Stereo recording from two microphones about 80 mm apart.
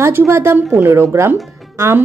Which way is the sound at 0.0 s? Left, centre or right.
Right.